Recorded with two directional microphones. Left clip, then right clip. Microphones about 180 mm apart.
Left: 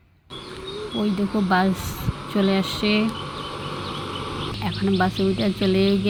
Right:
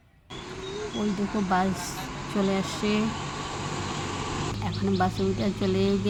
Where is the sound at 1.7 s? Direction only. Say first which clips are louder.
Left 4 dB; 15° right (ahead or behind).